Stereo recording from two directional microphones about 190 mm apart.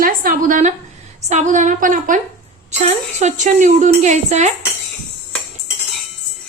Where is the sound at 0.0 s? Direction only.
45° right (ahead or behind).